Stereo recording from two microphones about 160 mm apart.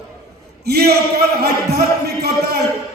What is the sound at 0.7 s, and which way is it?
A man's voice, 85° right.